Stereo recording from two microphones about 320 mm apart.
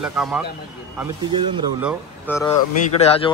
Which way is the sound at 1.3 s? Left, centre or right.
Centre.